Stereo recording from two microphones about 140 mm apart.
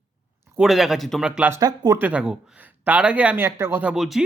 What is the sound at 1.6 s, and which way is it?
Speech, 25° right (ahead or behind).